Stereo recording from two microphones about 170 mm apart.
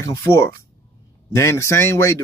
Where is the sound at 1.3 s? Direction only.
15° left (ahead or behind).